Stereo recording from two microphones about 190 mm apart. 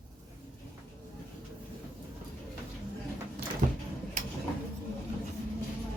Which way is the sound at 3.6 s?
40° right (ahead or behind).